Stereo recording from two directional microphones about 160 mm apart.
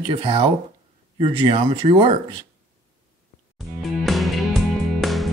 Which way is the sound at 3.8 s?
Centre (ahead or behind).